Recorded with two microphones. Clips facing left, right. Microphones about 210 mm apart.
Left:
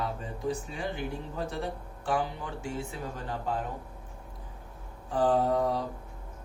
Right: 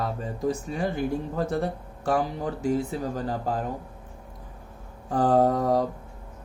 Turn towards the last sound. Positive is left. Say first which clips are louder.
# right 6 dB
turn(degrees=-45)  # may be behind; listen again after turning